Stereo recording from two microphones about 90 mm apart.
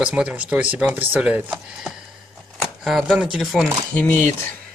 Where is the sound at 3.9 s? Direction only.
20° left (ahead or behind).